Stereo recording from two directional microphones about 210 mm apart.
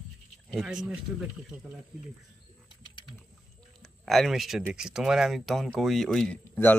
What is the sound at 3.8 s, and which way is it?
Speech, centre (ahead or behind).